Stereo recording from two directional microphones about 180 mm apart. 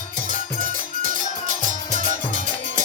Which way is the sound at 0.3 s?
45° right (ahead or behind).